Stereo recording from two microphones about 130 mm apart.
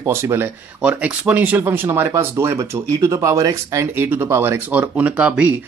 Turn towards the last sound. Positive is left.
turn(degrees=-10)  # may be behind; listen again after turning